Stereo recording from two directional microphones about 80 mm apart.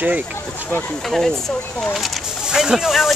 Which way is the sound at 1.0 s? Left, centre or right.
Centre.